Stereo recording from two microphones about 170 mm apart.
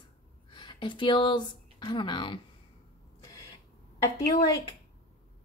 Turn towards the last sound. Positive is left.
turn(degrees=20)  # may be behind; listen again after turning